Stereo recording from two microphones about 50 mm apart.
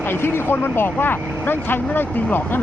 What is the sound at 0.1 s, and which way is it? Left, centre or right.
Speech, left.